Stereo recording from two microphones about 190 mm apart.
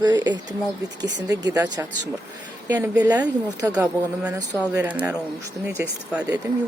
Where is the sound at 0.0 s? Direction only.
20° right (ahead or behind); by 6.2 s 5° right (ahead or behind).